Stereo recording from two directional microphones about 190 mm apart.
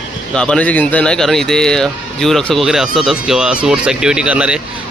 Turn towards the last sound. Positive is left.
turn(degrees=-5)  # may be behind; listen again after turning